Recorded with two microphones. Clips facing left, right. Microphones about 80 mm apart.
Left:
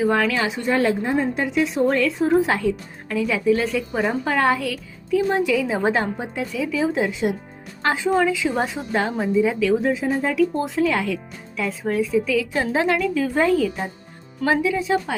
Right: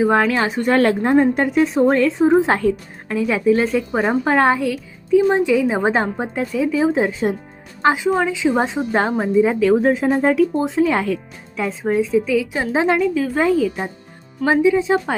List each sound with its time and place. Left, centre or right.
0.0 s a woman's voice: right
0.7 s a woman's voice: right
2.5 s a woman's voice: right
7.8 s a woman's voice: centre; by 10.4 s right
10.5 s a woman's voice: centre
10.8 s a woman's voice: right
13.1 s speech: centre
14.4 s a woman's voice: right